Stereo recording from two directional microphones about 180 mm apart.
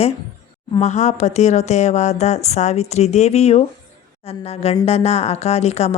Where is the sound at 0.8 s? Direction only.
40° left (ahead or behind).